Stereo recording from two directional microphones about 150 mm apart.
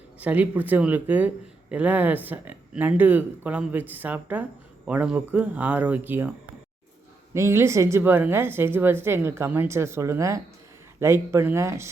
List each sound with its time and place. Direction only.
0.2 s a woman's voice: 10° right (ahead or behind)
7.3 s a woman's voice: 20° right (ahead or behind)